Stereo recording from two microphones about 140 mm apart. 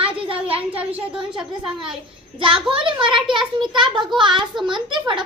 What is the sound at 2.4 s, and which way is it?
A child's voice, 40° right (ahead or behind).